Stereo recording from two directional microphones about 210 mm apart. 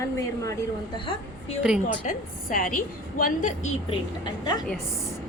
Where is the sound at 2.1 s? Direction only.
40° left (ahead or behind).